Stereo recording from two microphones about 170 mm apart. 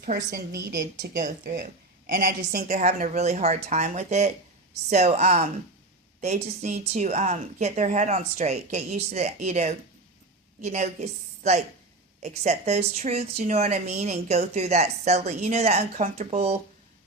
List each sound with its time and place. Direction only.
0.0 s a woman's voice: 60° right (ahead or behind); by 16.6 s 45° right (ahead or behind)